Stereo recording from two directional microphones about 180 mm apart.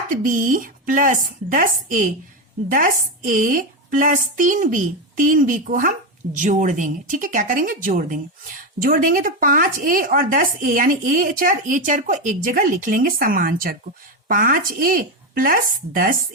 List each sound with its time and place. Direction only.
0.1 s a woman's voice: 50° right (ahead or behind)